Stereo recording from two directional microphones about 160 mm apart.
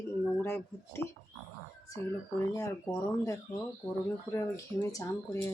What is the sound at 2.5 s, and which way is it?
Speech, 20° left (ahead or behind).